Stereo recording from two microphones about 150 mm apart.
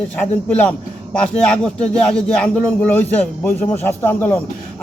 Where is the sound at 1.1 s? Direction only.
5° left (ahead or behind).